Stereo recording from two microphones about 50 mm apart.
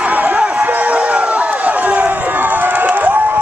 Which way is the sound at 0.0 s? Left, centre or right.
Right.